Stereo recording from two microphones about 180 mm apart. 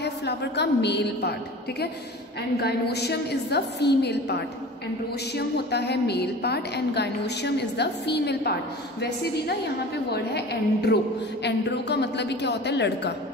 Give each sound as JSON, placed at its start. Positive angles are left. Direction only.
{"t": 0.0, "sound": "a woman's voice", "side_deg": 70}
{"t": 2.6, "sound": "a woman's voice", "side_deg": 65}
{"t": 10.1, "sound": "a woman's voice", "side_deg": 65}